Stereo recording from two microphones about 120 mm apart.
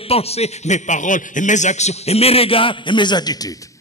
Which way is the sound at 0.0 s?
55° left (ahead or behind).